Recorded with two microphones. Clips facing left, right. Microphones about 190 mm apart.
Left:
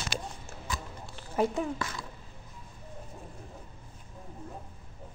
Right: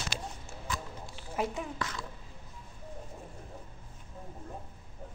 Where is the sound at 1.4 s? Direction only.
30° left (ahead or behind).